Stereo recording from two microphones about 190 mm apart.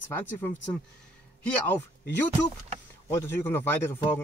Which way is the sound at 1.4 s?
10° left (ahead or behind).